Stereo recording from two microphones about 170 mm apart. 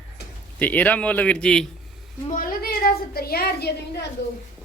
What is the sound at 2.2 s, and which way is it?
A woman's voice, 50° left (ahead or behind).